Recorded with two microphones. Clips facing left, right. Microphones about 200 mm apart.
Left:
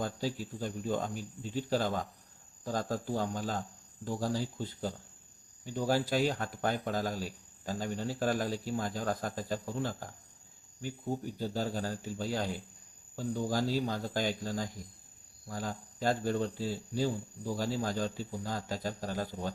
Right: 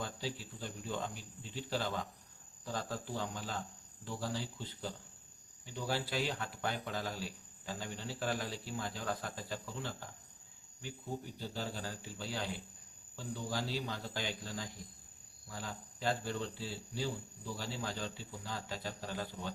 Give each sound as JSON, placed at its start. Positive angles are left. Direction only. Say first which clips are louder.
{"t": 0.0, "sound": "speech", "louder": "left 7 dB", "side_deg": 45}